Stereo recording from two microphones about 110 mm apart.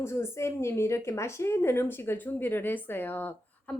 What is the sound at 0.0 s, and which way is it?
A woman's voice, 25° left (ahead or behind).